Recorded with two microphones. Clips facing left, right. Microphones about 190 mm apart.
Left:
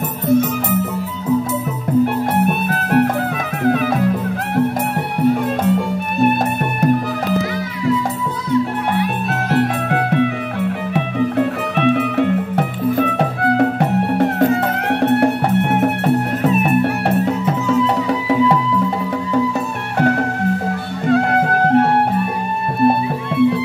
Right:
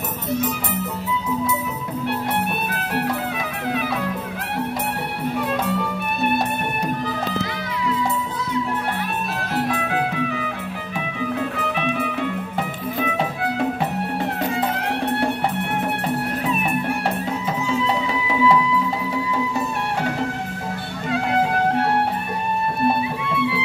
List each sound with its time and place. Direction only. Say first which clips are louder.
0.3 s music: left 9 dB; 50° left (ahead or behind)
2.4 s music: left 7 dB; 50° left (ahead or behind)
5.6 s music: left 6 dB; 50° left (ahead or behind)
9.5 s music: left 6 dB; 70° left (ahead or behind)
11.3 s music: left 7 dB; 60° left (ahead or behind)
17.2 s music: left 7 dB; 55° left (ahead or behind)
23.3 s music: left 10 dB; 45° left (ahead or behind)